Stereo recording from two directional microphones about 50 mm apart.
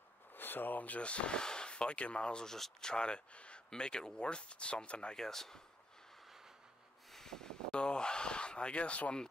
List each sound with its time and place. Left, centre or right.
0.3 s speech: left
2.4 s speech: centre
5.1 s speech: centre
7.1 s snort: centre
7.7 s speech: centre